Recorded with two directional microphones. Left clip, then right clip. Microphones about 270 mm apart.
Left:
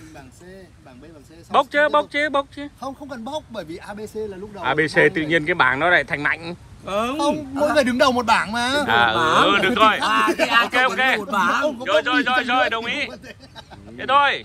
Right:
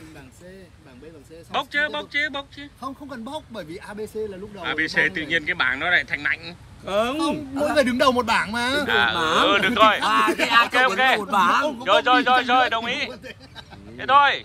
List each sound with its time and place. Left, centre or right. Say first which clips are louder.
1.5 s speech: left 7 dB; centre
6.9 s speech: right 1 dB; centre
7.2 s speech: left 4 dB; centre